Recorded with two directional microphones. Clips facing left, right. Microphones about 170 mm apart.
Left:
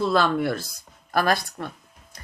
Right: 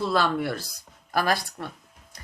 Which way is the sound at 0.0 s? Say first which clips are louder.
Left 3 dB; 10° right (ahead or behind).